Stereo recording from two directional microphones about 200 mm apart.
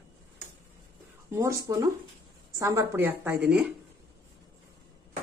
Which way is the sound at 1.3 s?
15° right (ahead or behind).